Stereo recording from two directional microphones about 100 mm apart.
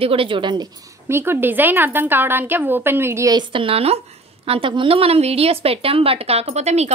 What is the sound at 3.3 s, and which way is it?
Speech, 55° right (ahead or behind).